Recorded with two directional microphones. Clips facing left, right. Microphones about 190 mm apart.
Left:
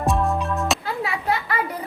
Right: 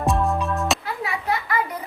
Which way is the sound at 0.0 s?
Centre (ahead or behind).